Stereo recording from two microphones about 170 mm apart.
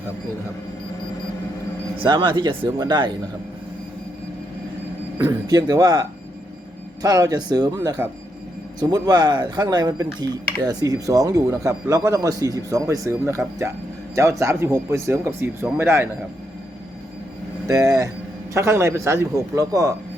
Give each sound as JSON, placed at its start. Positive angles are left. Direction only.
{"t": 2.0, "sound": "speech", "side_deg": -25}
{"t": 5.1, "sound": "speech", "side_deg": -20}
{"t": 17.7, "sound": "speech", "side_deg": -20}